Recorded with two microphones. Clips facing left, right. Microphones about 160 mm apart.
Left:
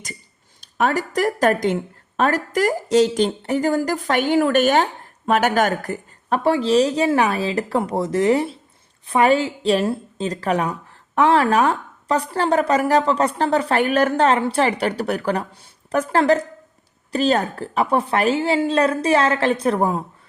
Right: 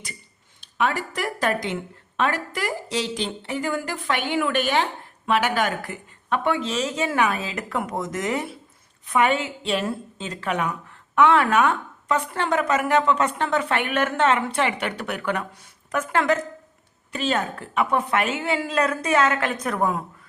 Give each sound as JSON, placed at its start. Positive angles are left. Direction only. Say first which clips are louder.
{"t": 0.6, "sound": "speech", "louder": "left 4 dB", "side_deg": 40}